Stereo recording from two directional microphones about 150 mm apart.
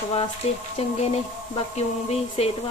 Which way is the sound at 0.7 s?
45° left (ahead or behind).